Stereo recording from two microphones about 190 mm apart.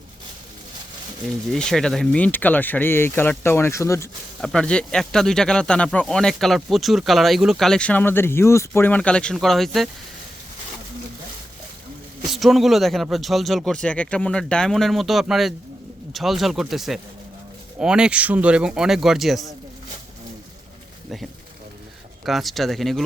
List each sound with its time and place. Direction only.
1.5 s speech: 5° left (ahead or behind)
4.4 s speech: 5° left (ahead or behind)
12.3 s speech: centre (ahead or behind)
22.3 s speech: centre (ahead or behind)